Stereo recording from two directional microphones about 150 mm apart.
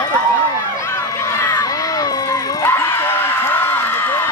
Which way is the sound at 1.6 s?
25° left (ahead or behind).